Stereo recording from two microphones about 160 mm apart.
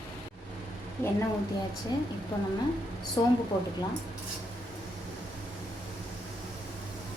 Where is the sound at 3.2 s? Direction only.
20° left (ahead or behind).